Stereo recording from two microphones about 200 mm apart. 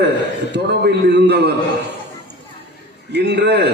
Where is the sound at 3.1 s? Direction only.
55° right (ahead or behind).